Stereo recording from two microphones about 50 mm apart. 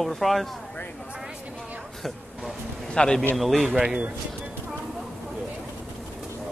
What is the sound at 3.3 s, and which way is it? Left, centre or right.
Speech, centre.